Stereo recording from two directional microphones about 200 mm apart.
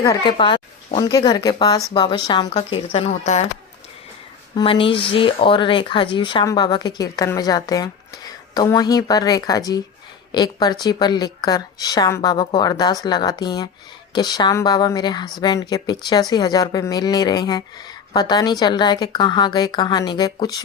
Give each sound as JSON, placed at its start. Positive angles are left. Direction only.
{"t": 0.0, "sound": "speech", "side_deg": 20}
{"t": 4.5, "sound": "speech", "side_deg": 25}